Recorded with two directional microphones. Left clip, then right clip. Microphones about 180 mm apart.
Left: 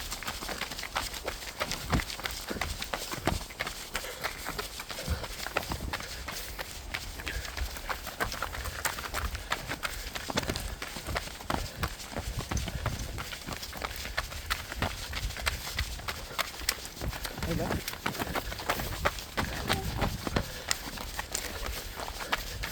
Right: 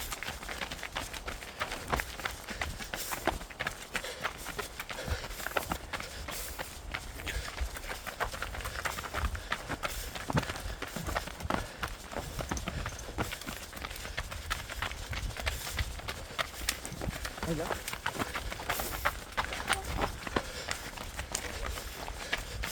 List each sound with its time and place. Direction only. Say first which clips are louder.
0.9 s a sound: left 6 dB; 60° left (ahead or behind)
1.5 s run: even; 60° left (ahead or behind)
5.6 s walk: left 1 dB; 60° left (ahead or behind)
8.2 s a sound: left 1 dB; 65° left (ahead or behind)
8.8 s run: left 2 dB; 65° left (ahead or behind)
13.8 s run: left 5 dB; 65° left (ahead or behind)
15.5 s horse: left 4 dB; 60° left (ahead or behind)
17.4 s a sound: left 1 dB; 60° left (ahead or behind)
22.3 s run: left 3 dB; 60° left (ahead or behind)